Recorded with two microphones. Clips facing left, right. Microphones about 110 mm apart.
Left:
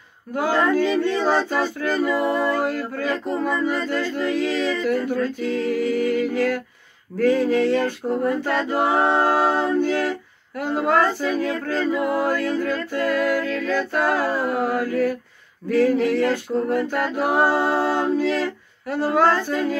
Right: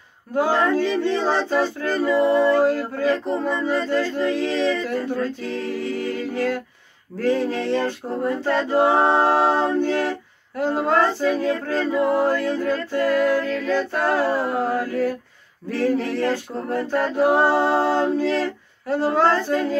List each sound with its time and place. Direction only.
0.3 s a capella: 25° right (ahead or behind)
16.1 s a capella: 25° right (ahead or behind)